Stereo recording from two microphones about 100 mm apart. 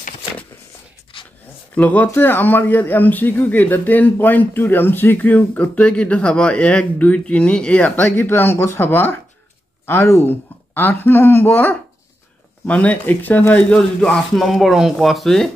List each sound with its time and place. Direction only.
1.8 s speech: 15° left (ahead or behind)